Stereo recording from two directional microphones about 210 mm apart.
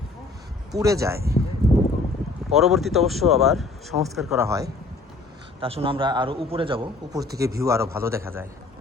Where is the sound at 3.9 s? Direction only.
25° right (ahead or behind).